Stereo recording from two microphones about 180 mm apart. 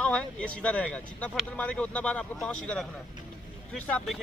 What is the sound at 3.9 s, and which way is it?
Speech, 5° left (ahead or behind).